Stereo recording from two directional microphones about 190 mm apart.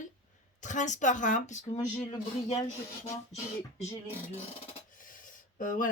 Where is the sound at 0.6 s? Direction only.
40° left (ahead or behind).